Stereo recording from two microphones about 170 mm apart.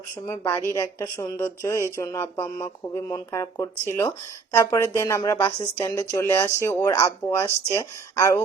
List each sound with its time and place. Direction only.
0.3 s speech: 15° left (ahead or behind)